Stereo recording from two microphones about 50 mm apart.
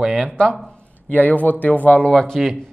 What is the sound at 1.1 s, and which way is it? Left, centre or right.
Speech, left.